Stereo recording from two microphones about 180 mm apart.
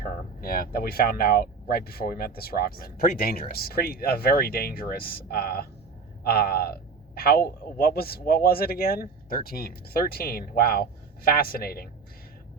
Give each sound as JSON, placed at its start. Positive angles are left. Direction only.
{"t": 0.0, "sound": "speech", "side_deg": 55}